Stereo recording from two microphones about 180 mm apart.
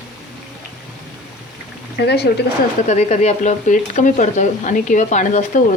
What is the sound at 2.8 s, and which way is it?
Speech, 40° left (ahead or behind).